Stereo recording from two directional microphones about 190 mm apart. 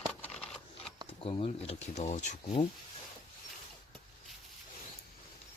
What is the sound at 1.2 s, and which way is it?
Speech, 30° left (ahead or behind).